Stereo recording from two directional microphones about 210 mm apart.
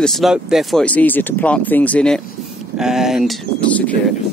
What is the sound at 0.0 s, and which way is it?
Speech, centre (ahead or behind).